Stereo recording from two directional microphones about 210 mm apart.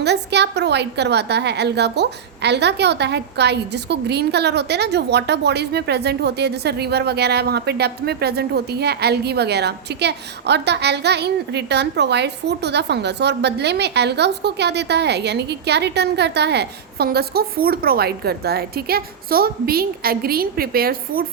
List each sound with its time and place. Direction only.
0.0 s a woman's voice: 55° right (ahead or behind)